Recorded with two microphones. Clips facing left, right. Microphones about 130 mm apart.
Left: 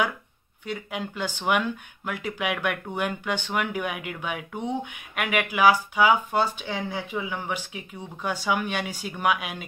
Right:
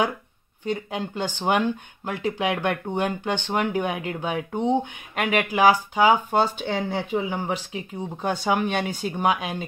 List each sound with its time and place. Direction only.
0.7 s speech: 30° right (ahead or behind)